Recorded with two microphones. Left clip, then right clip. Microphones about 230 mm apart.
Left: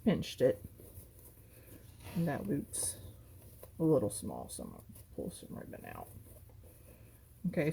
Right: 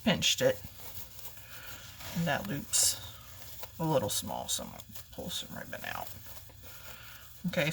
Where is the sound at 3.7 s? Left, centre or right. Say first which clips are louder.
Even; right.